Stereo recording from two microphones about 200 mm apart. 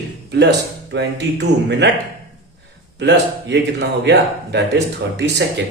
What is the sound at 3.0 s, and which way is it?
A man's voice, 60° right (ahead or behind).